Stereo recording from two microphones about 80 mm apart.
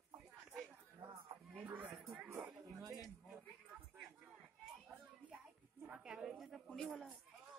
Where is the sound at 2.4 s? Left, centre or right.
Centre.